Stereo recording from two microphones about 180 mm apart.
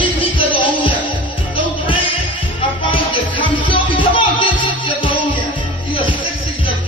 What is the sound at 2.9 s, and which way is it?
Music, 25° left (ahead or behind).